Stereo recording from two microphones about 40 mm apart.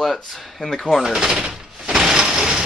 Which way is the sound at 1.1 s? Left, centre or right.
Centre.